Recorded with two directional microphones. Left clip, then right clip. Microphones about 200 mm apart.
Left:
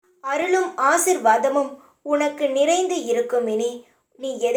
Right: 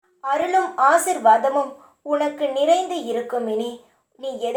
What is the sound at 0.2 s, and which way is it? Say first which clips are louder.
Speech: right 1 dB; 30° left (ahead or behind).